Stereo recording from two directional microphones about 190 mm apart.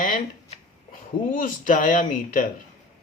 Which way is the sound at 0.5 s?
45° left (ahead or behind).